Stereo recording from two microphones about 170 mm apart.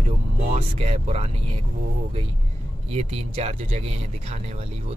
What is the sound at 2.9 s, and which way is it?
Speech, 40° right (ahead or behind).